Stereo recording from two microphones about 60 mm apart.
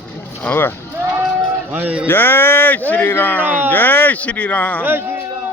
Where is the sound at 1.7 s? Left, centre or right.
Right.